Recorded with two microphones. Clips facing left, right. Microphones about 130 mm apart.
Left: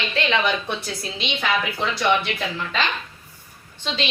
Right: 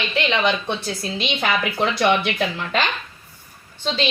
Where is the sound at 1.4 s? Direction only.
60° right (ahead or behind).